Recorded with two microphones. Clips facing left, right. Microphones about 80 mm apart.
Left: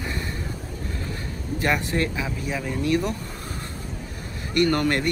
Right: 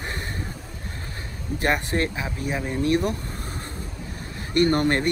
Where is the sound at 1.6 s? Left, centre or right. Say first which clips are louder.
Even; right.